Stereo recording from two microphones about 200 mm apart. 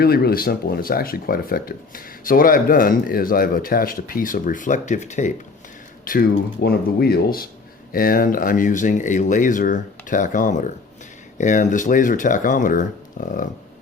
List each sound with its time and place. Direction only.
0.0 s speech: 50° left (ahead or behind)
6.1 s speech: 50° left (ahead or behind)